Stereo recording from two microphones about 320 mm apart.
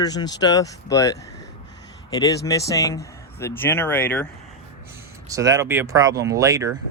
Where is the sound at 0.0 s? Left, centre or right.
Centre.